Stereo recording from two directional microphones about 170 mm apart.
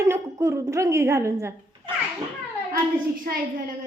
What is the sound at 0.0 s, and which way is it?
A woman's voice, 15° right (ahead or behind).